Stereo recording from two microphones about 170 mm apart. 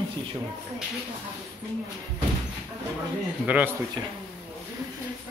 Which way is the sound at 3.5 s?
10° right (ahead or behind).